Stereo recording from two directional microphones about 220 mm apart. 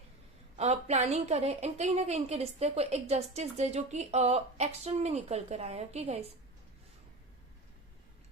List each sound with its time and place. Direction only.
0.5 s a woman's voice: 30° right (ahead or behind)